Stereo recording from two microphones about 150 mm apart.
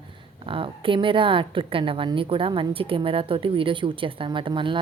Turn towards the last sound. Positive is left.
turn(degrees=-35)  # may be behind; listen again after turning